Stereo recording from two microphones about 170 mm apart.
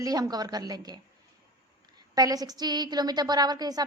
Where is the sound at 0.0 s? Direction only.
20° right (ahead or behind).